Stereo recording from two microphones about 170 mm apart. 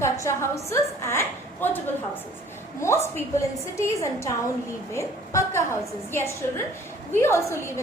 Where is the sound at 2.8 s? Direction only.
15° left (ahead or behind).